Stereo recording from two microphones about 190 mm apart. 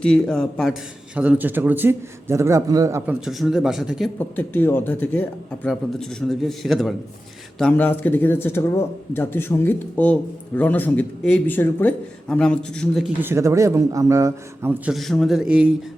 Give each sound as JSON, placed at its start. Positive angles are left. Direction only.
{"t": 0.0, "sound": "a man's voice", "side_deg": 5}
{"t": 3.2, "sound": "a man's voice", "side_deg": 0}
{"t": 4.2, "sound": "a man's voice", "side_deg": 10}
{"t": 13.2, "sound": "a man's voice", "side_deg": -15}
{"t": 14.9, "sound": "a man's voice", "side_deg": 0}